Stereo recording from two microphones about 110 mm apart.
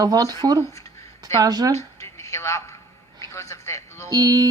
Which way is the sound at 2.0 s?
25° left (ahead or behind).